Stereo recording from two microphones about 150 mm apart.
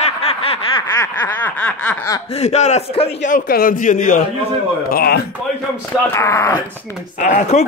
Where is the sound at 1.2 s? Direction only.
10° left (ahead or behind).